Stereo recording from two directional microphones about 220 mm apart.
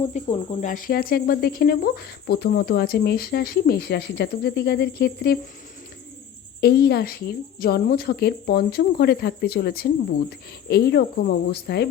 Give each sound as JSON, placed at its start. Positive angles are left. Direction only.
{"t": 0.0, "sound": "cricket", "side_deg": 30}
{"t": 6.6, "sound": "cricket", "side_deg": 45}